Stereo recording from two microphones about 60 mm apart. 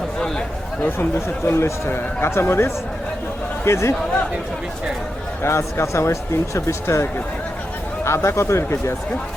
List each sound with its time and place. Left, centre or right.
0.2 s a sound: centre
1.5 s speech: left
5.4 s speech: left